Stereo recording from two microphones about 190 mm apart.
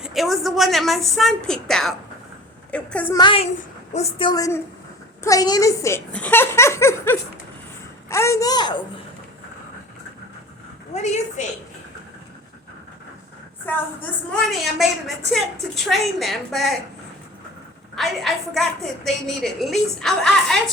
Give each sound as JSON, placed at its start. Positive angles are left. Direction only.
{"t": 0.0, "sound": "a woman's voice", "side_deg": 0}
{"t": 3.2, "sound": "a woman's voice", "side_deg": 30}
{"t": 10.9, "sound": "a woman's voice", "side_deg": 35}
{"t": 13.7, "sound": "a child's voice", "side_deg": 10}
{"t": 17.9, "sound": "a woman's voice", "side_deg": 0}